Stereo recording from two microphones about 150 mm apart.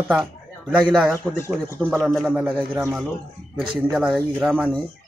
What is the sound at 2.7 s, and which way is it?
Speech, 15° right (ahead or behind).